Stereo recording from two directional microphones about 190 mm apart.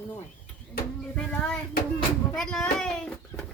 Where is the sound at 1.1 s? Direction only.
5° left (ahead or behind).